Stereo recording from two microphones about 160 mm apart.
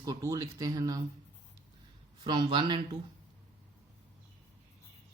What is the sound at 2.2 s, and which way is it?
Speech, 30° right (ahead or behind).